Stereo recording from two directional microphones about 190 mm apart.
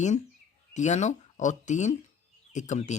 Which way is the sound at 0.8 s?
40° left (ahead or behind).